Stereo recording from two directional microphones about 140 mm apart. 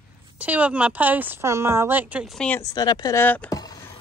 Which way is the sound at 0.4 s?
10° right (ahead or behind).